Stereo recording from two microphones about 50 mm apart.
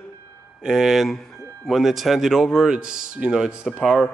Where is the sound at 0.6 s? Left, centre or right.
Centre.